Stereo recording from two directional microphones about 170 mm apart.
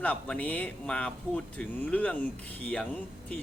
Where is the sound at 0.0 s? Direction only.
10° left (ahead or behind).